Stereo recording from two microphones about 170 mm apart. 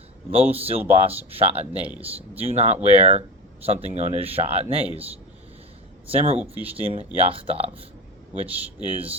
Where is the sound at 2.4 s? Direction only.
40° right (ahead or behind).